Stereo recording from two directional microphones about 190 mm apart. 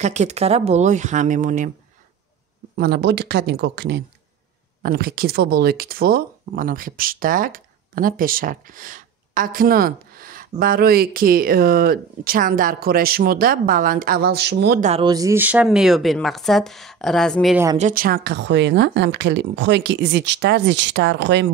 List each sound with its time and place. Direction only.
0.0 s speech: 35° right (ahead or behind)
2.8 s speech: 60° right (ahead or behind)
14.8 s speech: 35° right (ahead or behind)
15.0 s speech: 20° right (ahead or behind); by 17.6 s centre (ahead or behind)
17.7 s speech: 45° right (ahead or behind); by 21.5 s 70° right (ahead or behind)